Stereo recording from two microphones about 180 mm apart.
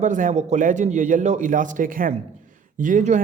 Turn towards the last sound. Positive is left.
turn(degrees=-45)  # may be behind; listen again after turning